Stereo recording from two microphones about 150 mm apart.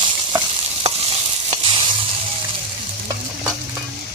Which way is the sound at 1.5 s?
40° right (ahead or behind).